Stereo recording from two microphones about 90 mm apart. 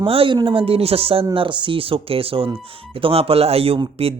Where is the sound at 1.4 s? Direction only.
65° right (ahead or behind).